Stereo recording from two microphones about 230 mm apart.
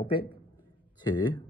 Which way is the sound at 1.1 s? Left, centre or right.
Centre.